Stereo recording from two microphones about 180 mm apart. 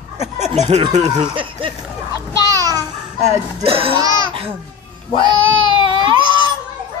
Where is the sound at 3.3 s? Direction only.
30° right (ahead or behind).